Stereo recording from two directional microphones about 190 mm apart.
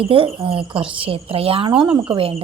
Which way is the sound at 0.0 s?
30° right (ahead or behind).